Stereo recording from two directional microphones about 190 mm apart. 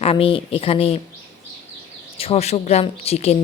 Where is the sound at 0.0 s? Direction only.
30° left (ahead or behind).